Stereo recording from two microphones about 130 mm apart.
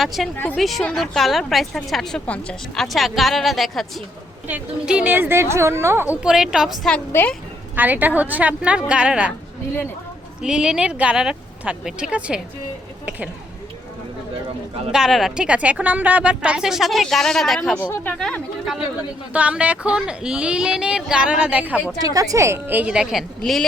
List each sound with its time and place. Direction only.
0.0 s a woman's voice: centre (ahead or behind)
0.3 s speech: 10° left (ahead or behind)
0.6 s a woman's voice: centre (ahead or behind)
4.4 s speech: 10° right (ahead or behind)
6.1 s a woman's voice: 5° right (ahead or behind)
6.9 s speech: 15° left (ahead or behind)
7.8 s speech: 15° right (ahead or behind)
10.4 s speech: 5° right (ahead or behind)
14.9 s a woman's voice: centre (ahead or behind)
19.3 s speech: 10° right (ahead or behind)
22.0 s a woman's voice: 25° right (ahead or behind); by 23.6 s 5° left (ahead or behind)